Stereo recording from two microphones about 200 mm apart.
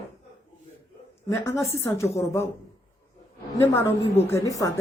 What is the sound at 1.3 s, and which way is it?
Speech, 15° left (ahead or behind).